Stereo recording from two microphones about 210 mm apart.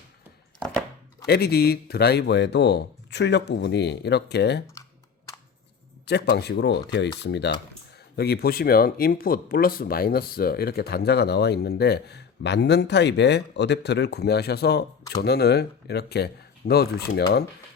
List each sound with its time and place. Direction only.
1.3 s speech: 50° left (ahead or behind)
6.1 s speech: 50° left (ahead or behind)